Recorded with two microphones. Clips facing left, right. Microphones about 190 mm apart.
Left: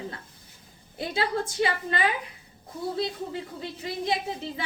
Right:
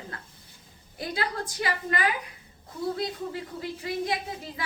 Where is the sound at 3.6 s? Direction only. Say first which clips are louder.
Right 3 dB; 25° left (ahead or behind).